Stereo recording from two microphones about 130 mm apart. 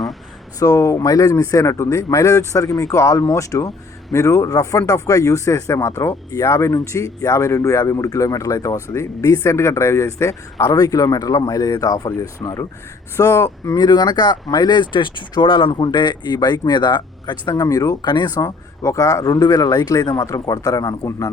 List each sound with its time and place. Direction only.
0.6 s speech: 30° left (ahead or behind)